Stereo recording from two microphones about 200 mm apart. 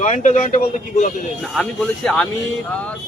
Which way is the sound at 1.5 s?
Centre (ahead or behind).